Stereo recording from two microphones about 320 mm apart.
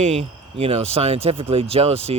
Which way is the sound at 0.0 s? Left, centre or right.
Centre.